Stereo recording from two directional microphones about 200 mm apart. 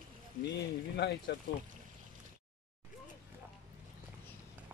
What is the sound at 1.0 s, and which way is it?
Speech, 55° left (ahead or behind).